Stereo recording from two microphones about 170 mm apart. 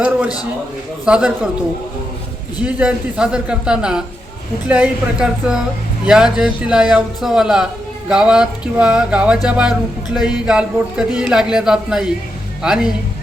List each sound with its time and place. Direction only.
1.0 s speech: 5° right (ahead or behind)
2.6 s speech: 5° right (ahead or behind)